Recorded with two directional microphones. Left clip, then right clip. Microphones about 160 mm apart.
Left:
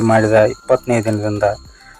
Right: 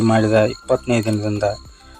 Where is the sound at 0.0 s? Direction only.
Centre (ahead or behind).